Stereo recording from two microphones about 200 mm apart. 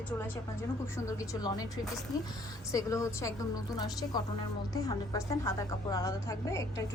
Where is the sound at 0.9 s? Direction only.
15° left (ahead or behind).